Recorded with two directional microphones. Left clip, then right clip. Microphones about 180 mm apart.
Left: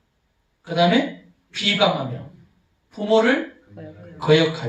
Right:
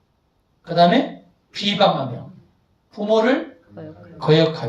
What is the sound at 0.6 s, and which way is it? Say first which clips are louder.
Speech: right 3 dB; 10° right (ahead or behind).